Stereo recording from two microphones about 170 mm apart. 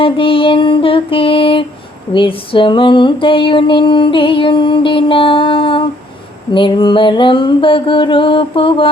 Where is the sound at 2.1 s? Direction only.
30° left (ahead or behind).